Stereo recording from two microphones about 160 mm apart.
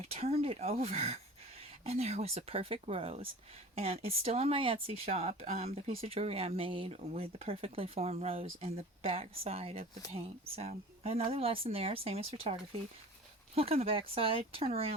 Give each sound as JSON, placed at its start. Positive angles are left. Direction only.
{"t": 0.1, "sound": "speech", "side_deg": -40}
{"t": 13.6, "sound": "speech", "side_deg": -40}